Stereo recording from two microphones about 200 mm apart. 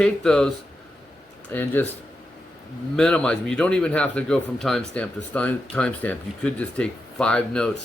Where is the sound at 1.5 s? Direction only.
10° left (ahead or behind).